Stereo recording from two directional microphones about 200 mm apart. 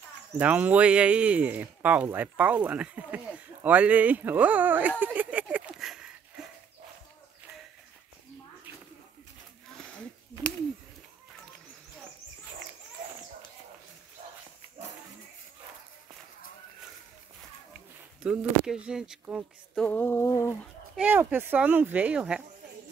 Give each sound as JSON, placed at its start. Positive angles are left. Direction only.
{"t": 0.4, "sound": "speech", "side_deg": -5}
{"t": 18.2, "sound": "speech", "side_deg": -5}
{"t": 19.9, "sound": "a sound", "side_deg": 10}
{"t": 20.9, "sound": "speech", "side_deg": -10}